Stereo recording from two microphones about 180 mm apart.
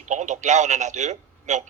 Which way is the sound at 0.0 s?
45° right (ahead or behind).